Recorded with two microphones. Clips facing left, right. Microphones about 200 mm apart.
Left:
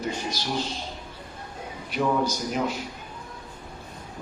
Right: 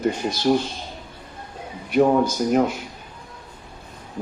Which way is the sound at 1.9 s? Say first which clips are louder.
Right 7 dB; 55° right (ahead or behind).